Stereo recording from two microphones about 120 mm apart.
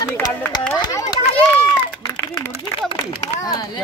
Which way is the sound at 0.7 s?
35° left (ahead or behind).